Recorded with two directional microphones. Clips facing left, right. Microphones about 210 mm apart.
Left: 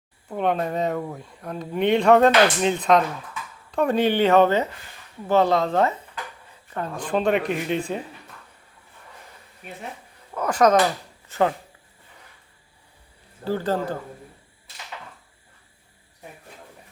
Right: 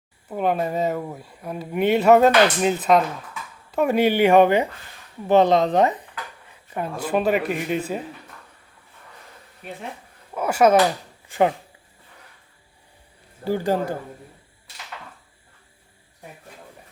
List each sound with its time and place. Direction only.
0.3 s speech: 5° right (ahead or behind)
10.3 s speech: 10° right (ahead or behind)
13.4 s speech: 15° right (ahead or behind)